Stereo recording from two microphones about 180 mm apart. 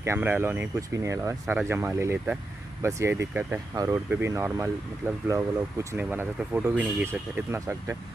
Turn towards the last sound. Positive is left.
turn(degrees=-15)  # may be behind; listen again after turning